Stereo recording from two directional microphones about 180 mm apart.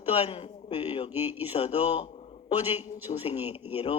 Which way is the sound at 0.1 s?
35° left (ahead or behind).